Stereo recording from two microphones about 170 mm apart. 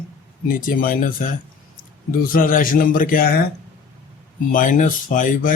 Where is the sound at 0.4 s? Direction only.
55° left (ahead or behind).